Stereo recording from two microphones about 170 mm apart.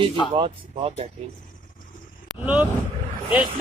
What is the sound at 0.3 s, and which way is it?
Speech, 30° right (ahead or behind).